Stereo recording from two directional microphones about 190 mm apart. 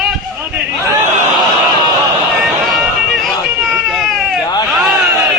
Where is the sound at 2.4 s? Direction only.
Centre (ahead or behind).